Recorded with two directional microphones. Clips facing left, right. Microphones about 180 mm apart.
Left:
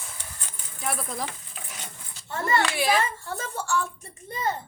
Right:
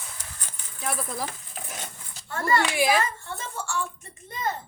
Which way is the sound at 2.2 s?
20° left (ahead or behind).